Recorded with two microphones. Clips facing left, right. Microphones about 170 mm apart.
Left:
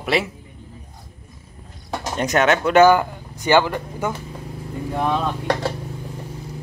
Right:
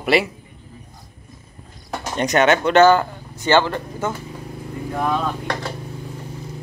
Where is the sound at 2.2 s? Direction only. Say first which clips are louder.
Right 2 dB; centre (ahead or behind).